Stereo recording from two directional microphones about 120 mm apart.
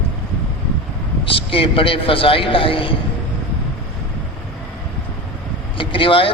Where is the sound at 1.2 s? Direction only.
50° left (ahead or behind).